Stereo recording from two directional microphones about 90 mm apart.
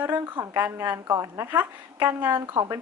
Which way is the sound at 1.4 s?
25° right (ahead or behind).